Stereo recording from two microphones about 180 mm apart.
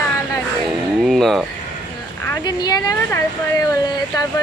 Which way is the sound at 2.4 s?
20° left (ahead or behind).